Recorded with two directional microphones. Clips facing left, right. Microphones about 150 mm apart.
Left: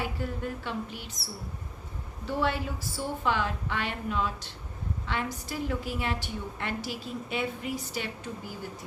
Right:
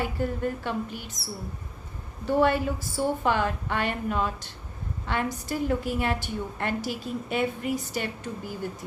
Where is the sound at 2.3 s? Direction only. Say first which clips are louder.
Right 7 dB; 50° right (ahead or behind).